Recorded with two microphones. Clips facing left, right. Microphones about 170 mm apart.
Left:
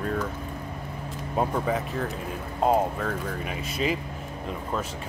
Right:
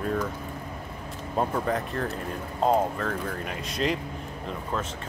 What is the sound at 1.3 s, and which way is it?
Speech, 5° left (ahead or behind).